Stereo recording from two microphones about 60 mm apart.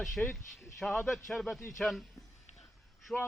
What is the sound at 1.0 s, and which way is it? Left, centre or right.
Speech, centre.